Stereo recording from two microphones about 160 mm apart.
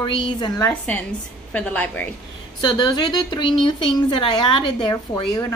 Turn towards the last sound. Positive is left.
turn(degrees=20)  # may be behind; listen again after turning